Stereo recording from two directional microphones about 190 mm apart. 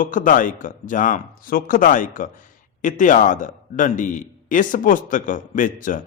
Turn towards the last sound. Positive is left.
turn(degrees=45)  # may be behind; listen again after turning